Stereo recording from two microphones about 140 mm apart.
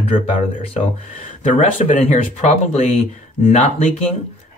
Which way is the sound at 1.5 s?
55° left (ahead or behind).